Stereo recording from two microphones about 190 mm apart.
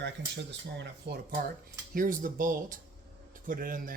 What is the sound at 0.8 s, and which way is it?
Speech, 55° right (ahead or behind).